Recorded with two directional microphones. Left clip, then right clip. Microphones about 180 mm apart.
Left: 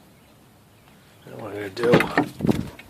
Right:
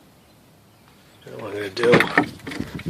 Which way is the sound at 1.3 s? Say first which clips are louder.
Right 3 dB; 5° right (ahead or behind).